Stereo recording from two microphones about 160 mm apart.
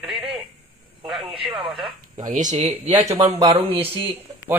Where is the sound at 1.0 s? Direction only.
Centre (ahead or behind).